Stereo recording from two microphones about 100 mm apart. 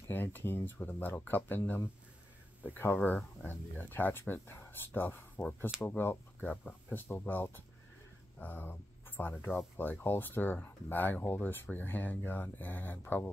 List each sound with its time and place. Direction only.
0.1 s speech: 20° left (ahead or behind)
2.6 s speech: 20° left (ahead or behind)